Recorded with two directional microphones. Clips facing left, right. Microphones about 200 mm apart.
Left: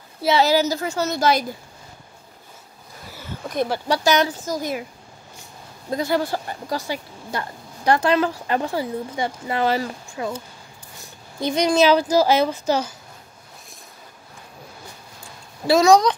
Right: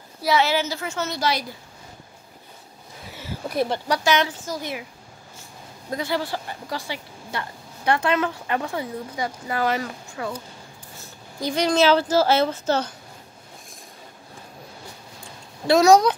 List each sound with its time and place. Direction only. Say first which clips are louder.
0.4 s speech: left 5 dB; 40° left (ahead or behind)
3.1 s a sound: right 1 dB; 5° right (ahead or behind)
4.0 s speech: left 3 dB; 40° left (ahead or behind)
5.9 s a woman's voice: left 4 dB; 40° left (ahead or behind); by 12.9 s 10° left (ahead or behind)
15.6 s speech: even; centre (ahead or behind)